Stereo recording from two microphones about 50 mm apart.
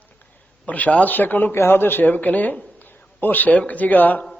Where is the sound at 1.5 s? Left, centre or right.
Left.